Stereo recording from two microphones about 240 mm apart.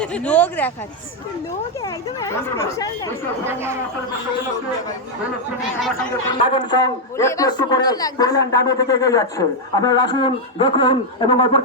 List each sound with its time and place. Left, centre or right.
0.0 s speech: centre
1.8 s a man's voice: centre
3.4 s speech: centre
6.5 s a man's voice: centre